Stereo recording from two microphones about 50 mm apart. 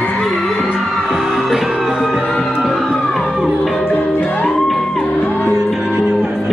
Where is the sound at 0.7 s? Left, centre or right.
Centre.